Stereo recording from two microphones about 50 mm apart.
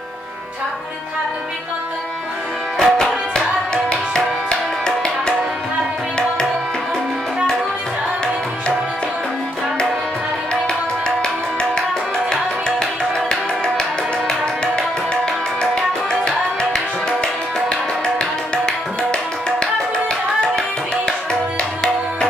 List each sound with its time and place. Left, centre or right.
2.8 s music: centre
10.5 s music: centre
20.3 s music: centre